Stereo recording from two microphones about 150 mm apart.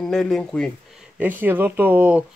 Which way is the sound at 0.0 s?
5° left (ahead or behind).